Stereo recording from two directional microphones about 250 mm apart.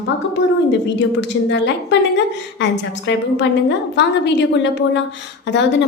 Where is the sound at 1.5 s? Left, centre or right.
Left.